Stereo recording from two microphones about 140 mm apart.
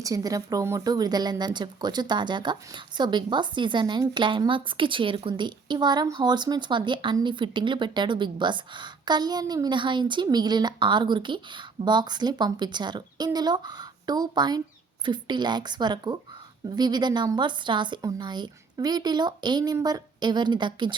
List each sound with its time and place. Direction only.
0.0 s speech: 25° right (ahead or behind)